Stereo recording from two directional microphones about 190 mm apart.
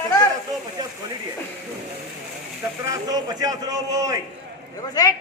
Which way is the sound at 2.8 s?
20° right (ahead or behind).